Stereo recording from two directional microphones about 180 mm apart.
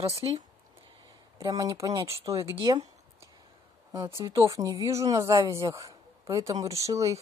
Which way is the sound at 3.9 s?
25° right (ahead or behind).